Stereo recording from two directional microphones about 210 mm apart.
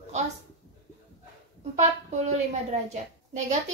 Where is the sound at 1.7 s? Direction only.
35° right (ahead or behind).